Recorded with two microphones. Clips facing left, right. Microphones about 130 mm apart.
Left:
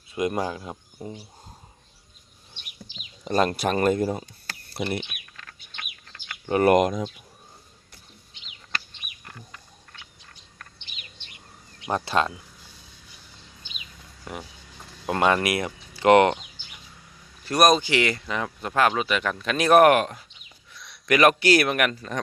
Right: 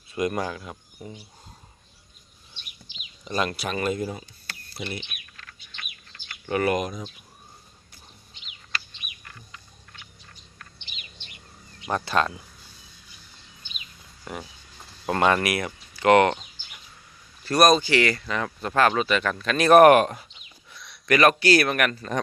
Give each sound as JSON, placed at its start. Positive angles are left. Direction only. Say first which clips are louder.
{"t": 0.1, "sound": "speech", "louder": "left 1 dB", "side_deg": 20}
{"t": 2.9, "sound": "speech", "louder": "left 5 dB", "side_deg": 40}
{"t": 4.9, "sound": "speech", "louder": "left 6 dB", "side_deg": 65}
{"t": 6.4, "sound": "speech", "louder": "left 3 dB", "side_deg": 30}
{"t": 6.7, "sound": "speech", "louder": "left 10 dB", "side_deg": 90}
{"t": 11.9, "sound": "speech", "louder": "even", "side_deg": 20}
{"t": 15.0, "sound": "speech", "louder": "even", "side_deg": 10}
{"t": 17.4, "sound": "speech", "louder": "right 1 dB", "side_deg": 15}
{"t": 19.7, "sound": "speech", "louder": "right 3 dB", "side_deg": 0}
{"t": 20.7, "sound": "a sound", "louder": "even", "side_deg": 0}
{"t": 21.1, "sound": "speech", "louder": "even", "side_deg": 15}